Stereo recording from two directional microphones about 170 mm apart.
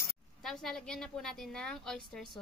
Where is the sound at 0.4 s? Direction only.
Centre (ahead or behind).